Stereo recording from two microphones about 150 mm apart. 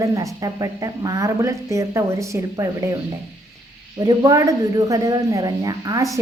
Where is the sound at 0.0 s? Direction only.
20° right (ahead or behind).